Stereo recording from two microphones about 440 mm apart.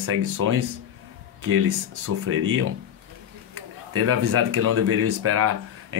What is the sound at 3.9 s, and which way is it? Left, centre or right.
Speech, right.